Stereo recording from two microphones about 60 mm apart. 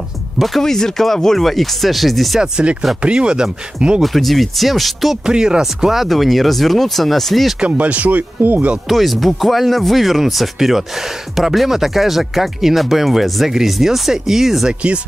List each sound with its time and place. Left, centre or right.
0.4 s speech: centre
2.4 s speech: centre
4.0 s speech: centre
5.2 s speech: centre
7.6 s speech: right
8.8 s speech: centre
14.7 s speech: centre